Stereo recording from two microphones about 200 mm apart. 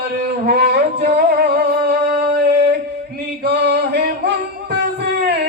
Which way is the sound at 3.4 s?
55° right (ahead or behind).